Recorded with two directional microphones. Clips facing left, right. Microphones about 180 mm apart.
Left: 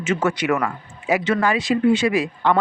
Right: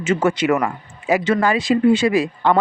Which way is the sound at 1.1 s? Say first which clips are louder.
Right 2 dB; 35° right (ahead or behind).